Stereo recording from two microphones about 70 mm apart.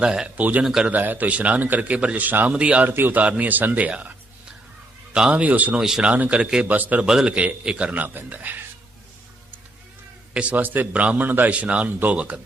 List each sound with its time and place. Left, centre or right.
0.0 s a man's voice: centre
0.9 s a man's voice: right
5.8 s a man's voice: centre
7.0 s a man's voice: centre
10.3 s a man's voice: right